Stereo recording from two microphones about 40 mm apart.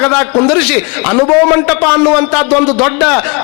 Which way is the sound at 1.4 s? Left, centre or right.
Centre.